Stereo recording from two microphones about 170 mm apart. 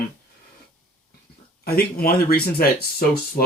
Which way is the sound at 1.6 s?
65° left (ahead or behind).